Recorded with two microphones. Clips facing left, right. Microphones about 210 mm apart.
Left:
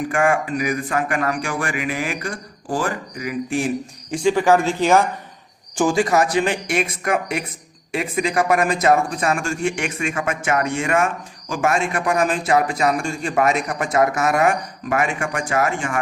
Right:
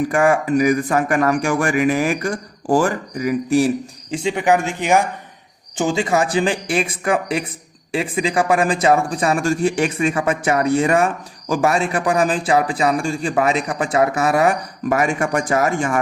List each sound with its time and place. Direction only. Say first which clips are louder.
0.1 s speech: right 1 dB; 40° right (ahead or behind)
4.1 s speech: left 1 dB; 25° right (ahead or behind); by 16.0 s 40° right (ahead or behind)